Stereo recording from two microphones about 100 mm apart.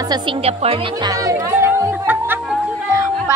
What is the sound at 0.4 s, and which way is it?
Speech, 90° right.